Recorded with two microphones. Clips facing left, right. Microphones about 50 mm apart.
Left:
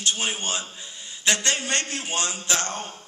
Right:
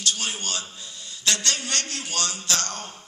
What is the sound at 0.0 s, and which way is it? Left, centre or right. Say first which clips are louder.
A man's voice: left 2 dB; left.